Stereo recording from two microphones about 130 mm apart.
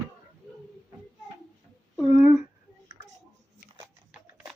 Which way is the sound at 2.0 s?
20° right (ahead or behind).